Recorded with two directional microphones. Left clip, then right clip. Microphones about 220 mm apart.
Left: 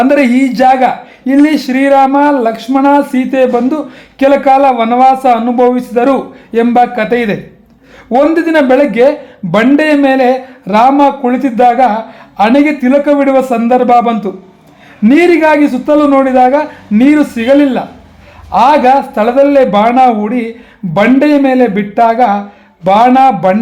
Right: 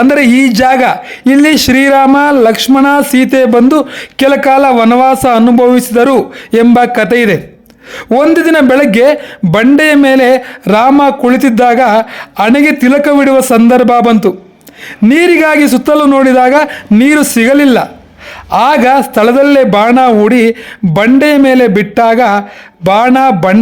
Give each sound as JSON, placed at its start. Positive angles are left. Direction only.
{"t": 0.0, "sound": "a man's voice", "side_deg": -40}